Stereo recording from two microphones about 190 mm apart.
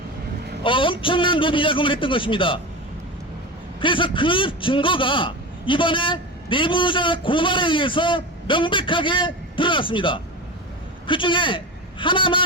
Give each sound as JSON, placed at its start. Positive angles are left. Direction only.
{"t": 0.6, "sound": "a man's voice", "side_deg": 25}
{"t": 3.8, "sound": "a man's voice", "side_deg": 25}